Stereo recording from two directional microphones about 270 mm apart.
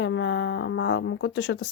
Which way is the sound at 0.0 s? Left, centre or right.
Left.